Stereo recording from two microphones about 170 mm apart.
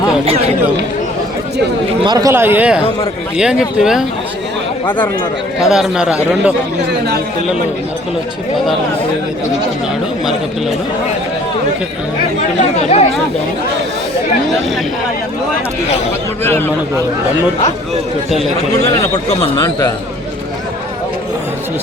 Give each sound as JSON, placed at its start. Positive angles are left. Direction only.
{"t": 2.0, "sound": "a man's voice", "side_deg": -20}
{"t": 5.5, "sound": "speech", "side_deg": 0}
{"t": 12.8, "sound": "speech", "side_deg": 40}
{"t": 16.4, "sound": "speech", "side_deg": 15}
{"t": 19.4, "sound": "speech", "side_deg": 15}